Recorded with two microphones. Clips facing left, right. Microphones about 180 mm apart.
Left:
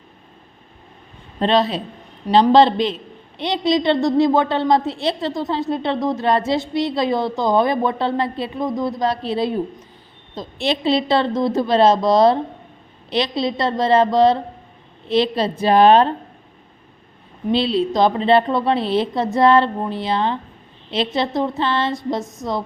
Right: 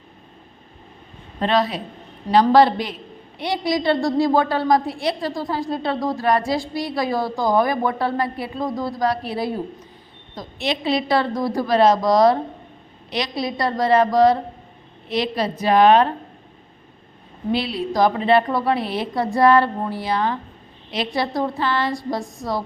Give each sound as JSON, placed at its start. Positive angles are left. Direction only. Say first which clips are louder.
{"t": 1.4, "sound": "a woman's voice", "louder": "left 3 dB", "side_deg": 25}
{"t": 17.5, "sound": "a woman's voice", "louder": "left 4 dB", "side_deg": 25}